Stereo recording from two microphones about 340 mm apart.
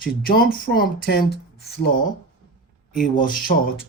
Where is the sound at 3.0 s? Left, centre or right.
Left.